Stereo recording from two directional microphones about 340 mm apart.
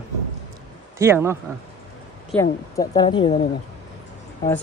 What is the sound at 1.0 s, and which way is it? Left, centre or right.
Speech, centre.